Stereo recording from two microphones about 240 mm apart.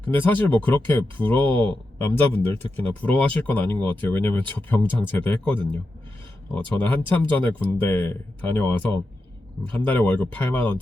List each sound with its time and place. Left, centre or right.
0.0 s speech: centre